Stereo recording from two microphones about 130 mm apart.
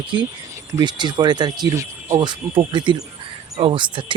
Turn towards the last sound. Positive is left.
turn(degrees=-40)  # may be behind; listen again after turning